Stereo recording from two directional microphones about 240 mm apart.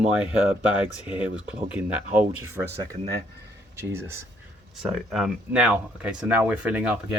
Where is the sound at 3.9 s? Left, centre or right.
Centre.